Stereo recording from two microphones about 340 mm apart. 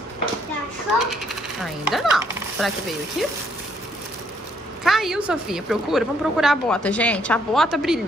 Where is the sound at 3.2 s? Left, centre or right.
Centre.